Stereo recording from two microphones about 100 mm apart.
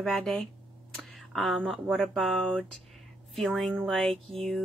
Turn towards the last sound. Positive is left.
turn(degrees=5)  # may be behind; listen again after turning